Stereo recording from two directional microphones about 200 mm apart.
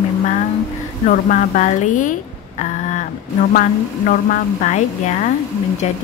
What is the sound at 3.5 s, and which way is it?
Speech, 40° left (ahead or behind).